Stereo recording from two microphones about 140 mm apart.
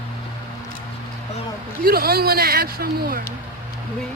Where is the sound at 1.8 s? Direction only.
90° right.